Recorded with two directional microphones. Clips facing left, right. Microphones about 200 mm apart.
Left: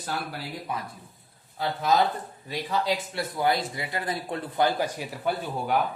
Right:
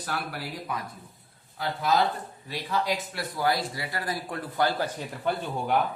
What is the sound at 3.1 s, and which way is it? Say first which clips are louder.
A man's voice: left 2 dB; 25° left (ahead or behind).